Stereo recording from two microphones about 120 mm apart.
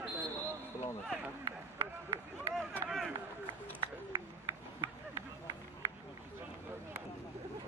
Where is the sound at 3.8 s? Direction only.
45° right (ahead or behind).